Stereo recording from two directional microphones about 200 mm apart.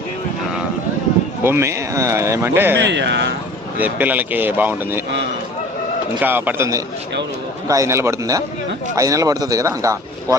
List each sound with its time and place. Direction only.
1.5 s speech: 15° right (ahead or behind)
2.7 s speech: 60° right (ahead or behind)
3.8 s speech: 10° right (ahead or behind)
6.1 s speech: 10° right (ahead or behind)